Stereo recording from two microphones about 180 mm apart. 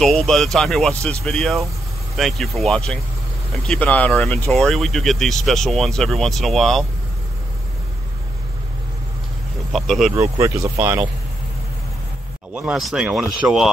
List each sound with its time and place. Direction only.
0.0 s speech: centre (ahead or behind)
9.7 s speech: centre (ahead or behind)
10.1 s speech: 15° right (ahead or behind)
12.5 s speech: 5° right (ahead or behind)